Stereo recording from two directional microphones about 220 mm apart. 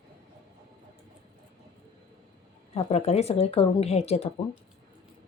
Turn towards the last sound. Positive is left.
turn(degrees=30)  # may be behind; listen again after turning